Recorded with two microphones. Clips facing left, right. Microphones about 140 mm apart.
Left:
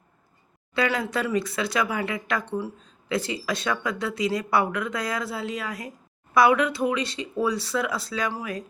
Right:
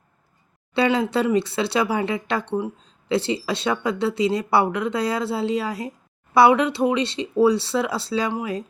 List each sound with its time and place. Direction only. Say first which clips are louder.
0.7 s speech: right 5 dB; 30° right (ahead or behind)